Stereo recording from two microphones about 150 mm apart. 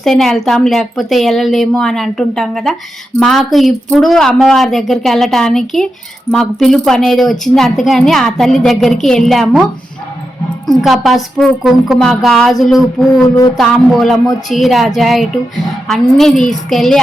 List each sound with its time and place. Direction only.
0.0 s a woman's voice: 5° left (ahead or behind)
10.7 s a woman's voice: centre (ahead or behind)
13.2 s a sound: 25° left (ahead or behind)
13.6 s a woman's voice: 5° left (ahead or behind)